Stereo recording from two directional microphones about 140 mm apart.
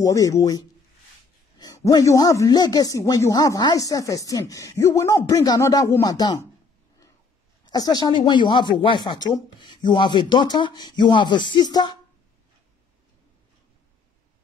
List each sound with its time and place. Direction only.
0.0 s speech: 25° left (ahead or behind)
1.9 s speech: 25° left (ahead or behind)
7.6 s speech: 30° left (ahead or behind)